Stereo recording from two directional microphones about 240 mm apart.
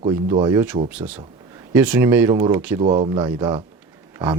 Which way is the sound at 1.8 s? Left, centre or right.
Centre.